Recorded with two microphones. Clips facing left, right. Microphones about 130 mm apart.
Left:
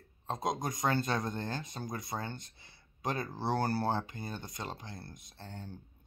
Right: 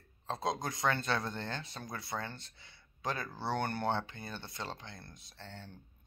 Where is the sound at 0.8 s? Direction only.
30° left (ahead or behind).